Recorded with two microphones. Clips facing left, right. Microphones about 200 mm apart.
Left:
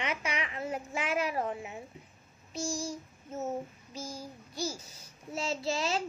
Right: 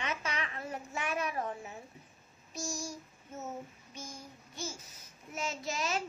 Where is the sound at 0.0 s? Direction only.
15° left (ahead or behind).